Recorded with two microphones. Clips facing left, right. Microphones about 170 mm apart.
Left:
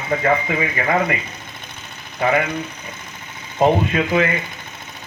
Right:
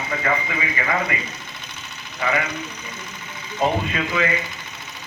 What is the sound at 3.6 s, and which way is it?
Speech, 55° left (ahead or behind).